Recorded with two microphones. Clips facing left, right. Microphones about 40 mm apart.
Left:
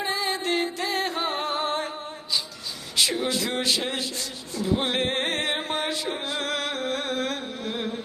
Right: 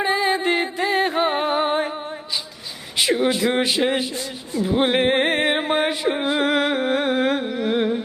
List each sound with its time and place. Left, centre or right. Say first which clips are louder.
0.0 s music: right 7 dB; right
3.0 s speech: right 6 dB; right